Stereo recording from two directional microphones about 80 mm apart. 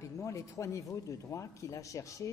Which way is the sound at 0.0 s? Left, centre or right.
Left.